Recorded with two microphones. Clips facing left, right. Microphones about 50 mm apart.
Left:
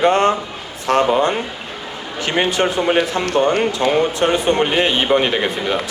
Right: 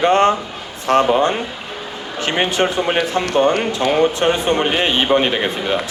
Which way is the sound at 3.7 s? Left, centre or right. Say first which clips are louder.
Right 1 dB; right.